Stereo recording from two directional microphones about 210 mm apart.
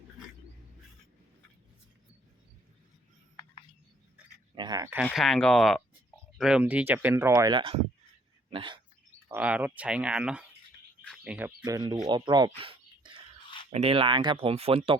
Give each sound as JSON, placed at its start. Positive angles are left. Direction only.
{"t": 4.5, "sound": "a sound", "side_deg": -20}
{"t": 4.9, "sound": "speech", "side_deg": 0}
{"t": 9.3, "sound": "speech", "side_deg": -5}